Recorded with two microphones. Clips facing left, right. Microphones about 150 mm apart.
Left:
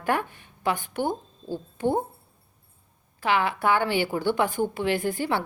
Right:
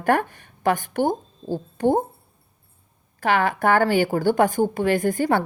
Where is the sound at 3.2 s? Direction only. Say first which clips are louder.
Right 4 dB; 45° right (ahead or behind).